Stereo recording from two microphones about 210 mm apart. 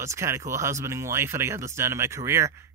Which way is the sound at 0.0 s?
15° right (ahead or behind).